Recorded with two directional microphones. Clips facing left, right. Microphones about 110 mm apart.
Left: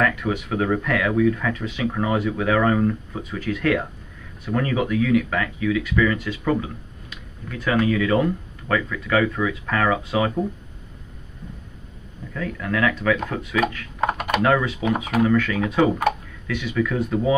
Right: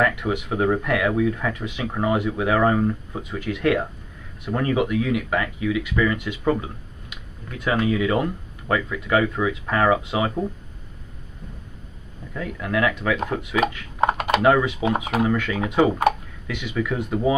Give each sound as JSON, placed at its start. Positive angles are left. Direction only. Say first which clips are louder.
{"t": 0.0, "sound": "speech", "louder": "even", "side_deg": -15}
{"t": 12.4, "sound": "speech", "louder": "even", "side_deg": -20}